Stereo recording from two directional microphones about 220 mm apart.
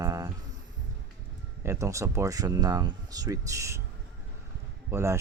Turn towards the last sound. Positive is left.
turn(degrees=-10)  # may be behind; listen again after turning